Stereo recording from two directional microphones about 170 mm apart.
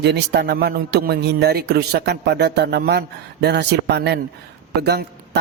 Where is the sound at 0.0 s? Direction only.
80° right.